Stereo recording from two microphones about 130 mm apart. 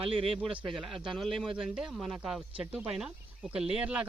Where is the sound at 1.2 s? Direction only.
Centre (ahead or behind).